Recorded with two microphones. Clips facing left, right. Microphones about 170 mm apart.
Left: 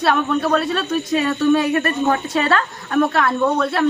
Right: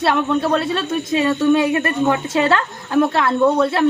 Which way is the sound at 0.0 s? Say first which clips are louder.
Right 1 dB; 25° right (ahead or behind).